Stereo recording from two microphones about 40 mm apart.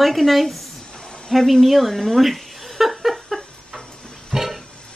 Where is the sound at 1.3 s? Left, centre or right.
Centre.